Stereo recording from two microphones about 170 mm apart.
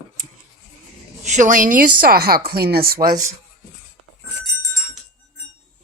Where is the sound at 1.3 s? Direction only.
50° right (ahead or behind).